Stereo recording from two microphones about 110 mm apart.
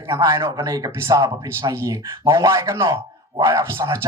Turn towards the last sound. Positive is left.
turn(degrees=-25)  # may be behind; listen again after turning